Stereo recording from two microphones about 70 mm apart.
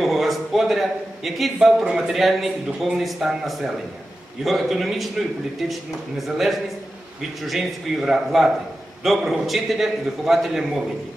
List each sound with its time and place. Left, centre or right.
0.0 s a man's voice: centre